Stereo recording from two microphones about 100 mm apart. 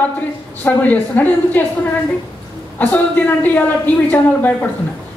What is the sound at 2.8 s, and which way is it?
A woman's voice, 20° left (ahead or behind).